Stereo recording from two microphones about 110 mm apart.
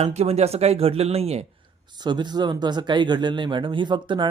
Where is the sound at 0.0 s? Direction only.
80° right.